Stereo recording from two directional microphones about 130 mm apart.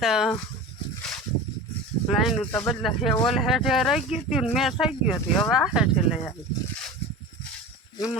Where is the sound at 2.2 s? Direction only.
10° left (ahead or behind).